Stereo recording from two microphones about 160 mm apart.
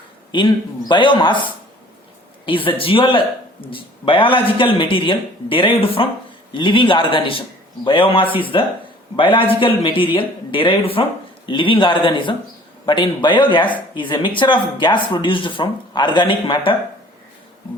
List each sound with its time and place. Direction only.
0.3 s speech: 30° left (ahead or behind)
2.5 s speech: 35° left (ahead or behind)